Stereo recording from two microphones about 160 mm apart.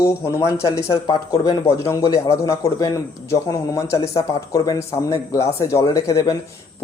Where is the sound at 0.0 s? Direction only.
15° left (ahead or behind).